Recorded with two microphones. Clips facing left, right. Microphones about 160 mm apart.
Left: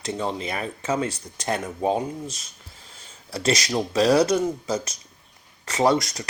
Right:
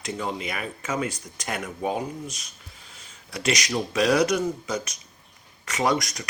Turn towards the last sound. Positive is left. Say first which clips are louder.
# left 4 dB
turn(degrees=30)  # may be behind; listen again after turning